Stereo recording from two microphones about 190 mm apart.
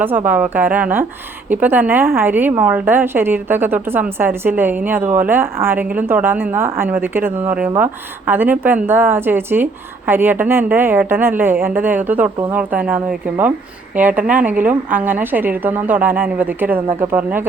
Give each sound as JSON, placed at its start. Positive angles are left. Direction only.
{"t": 0.0, "sound": "a woman's voice", "side_deg": -10}